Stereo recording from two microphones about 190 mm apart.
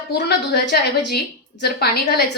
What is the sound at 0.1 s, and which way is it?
A woman's voice, 60° left (ahead or behind).